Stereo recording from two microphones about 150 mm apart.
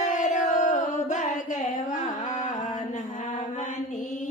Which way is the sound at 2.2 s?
50° left (ahead or behind).